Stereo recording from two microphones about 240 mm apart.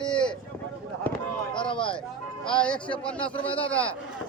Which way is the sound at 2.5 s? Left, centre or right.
Centre.